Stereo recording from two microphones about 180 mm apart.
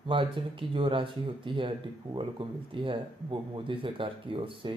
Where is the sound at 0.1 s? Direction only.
30° right (ahead or behind).